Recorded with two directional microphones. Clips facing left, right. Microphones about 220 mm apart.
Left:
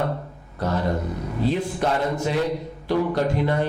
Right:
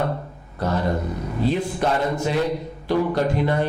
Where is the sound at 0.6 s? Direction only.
15° right (ahead or behind).